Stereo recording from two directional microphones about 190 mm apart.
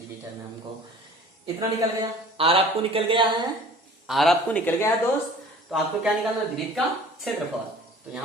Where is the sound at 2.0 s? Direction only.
30° right (ahead or behind).